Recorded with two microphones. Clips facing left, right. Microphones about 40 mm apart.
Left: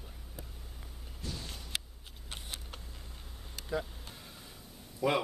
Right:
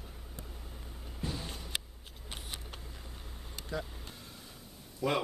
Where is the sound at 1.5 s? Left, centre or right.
Centre.